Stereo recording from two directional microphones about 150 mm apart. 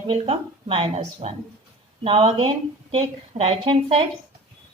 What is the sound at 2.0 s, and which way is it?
A woman's voice, 35° right (ahead or behind).